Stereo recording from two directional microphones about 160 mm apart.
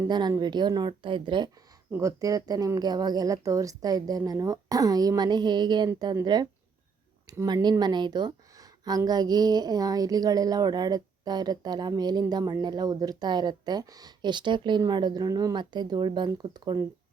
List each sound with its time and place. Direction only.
0.1 s speech: 25° right (ahead or behind)
1.9 s speech: 20° right (ahead or behind)